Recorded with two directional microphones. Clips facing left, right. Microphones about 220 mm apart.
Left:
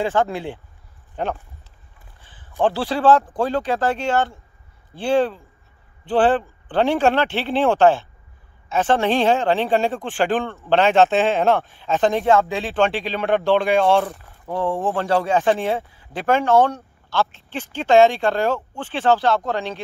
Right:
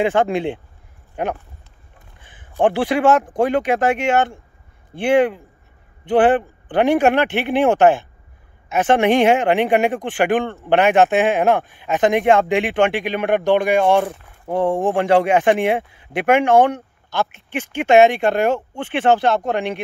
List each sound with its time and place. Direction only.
0.0 s speech: 15° right (ahead or behind)
2.5 s a man's voice: 15° right (ahead or behind)
14.0 s speech: 25° right (ahead or behind)
14.6 s speech: 15° right (ahead or behind)